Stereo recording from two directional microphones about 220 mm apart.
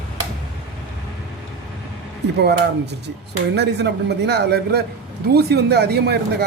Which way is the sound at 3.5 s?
50° right (ahead or behind).